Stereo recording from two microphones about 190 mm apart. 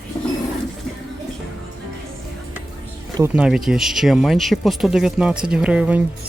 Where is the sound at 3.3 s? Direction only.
5° right (ahead or behind).